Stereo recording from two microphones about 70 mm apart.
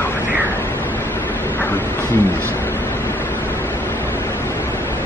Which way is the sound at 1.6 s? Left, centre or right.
Left.